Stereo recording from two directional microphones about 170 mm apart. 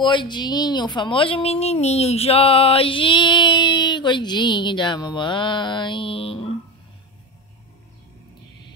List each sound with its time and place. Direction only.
0.0 s a woman's voice: 25° left (ahead or behind)